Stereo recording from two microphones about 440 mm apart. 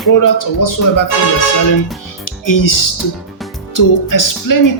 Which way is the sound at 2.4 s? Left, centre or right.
Left.